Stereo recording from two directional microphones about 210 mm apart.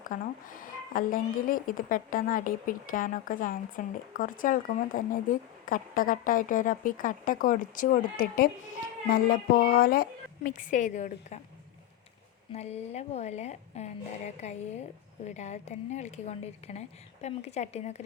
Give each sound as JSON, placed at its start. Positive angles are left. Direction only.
{"t": 0.0, "sound": "a woman's voice", "side_deg": 40}
{"t": 12.5, "sound": "a woman's voice", "side_deg": 30}